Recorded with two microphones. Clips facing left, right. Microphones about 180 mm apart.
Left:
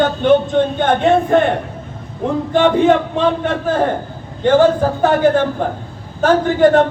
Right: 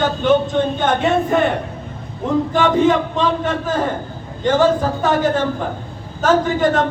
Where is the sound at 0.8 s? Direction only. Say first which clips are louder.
Left 4 dB; 55° left (ahead or behind).